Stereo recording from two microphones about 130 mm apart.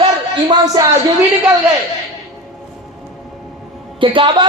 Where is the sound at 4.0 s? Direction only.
40° right (ahead or behind).